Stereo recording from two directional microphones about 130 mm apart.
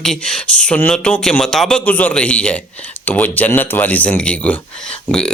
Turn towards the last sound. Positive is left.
turn(degrees=5)  # may be behind; listen again after turning